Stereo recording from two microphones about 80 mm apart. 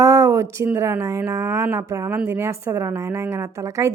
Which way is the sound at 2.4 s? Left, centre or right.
Right.